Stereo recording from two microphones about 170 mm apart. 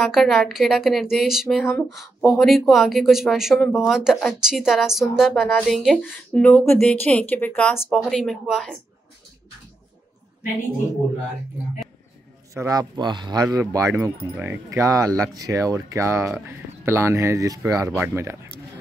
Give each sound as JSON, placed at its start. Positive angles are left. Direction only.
{"t": 0.0, "sound": "speech", "side_deg": 0}
{"t": 1.7, "sound": "speech", "side_deg": 15}
{"t": 2.0, "sound": "speech", "side_deg": 0}
{"t": 12.5, "sound": "speech", "side_deg": -20}